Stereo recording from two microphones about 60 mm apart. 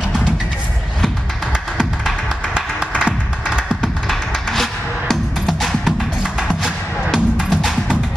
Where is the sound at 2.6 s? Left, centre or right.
Centre.